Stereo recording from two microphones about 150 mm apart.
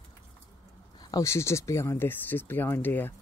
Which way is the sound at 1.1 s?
20° left (ahead or behind).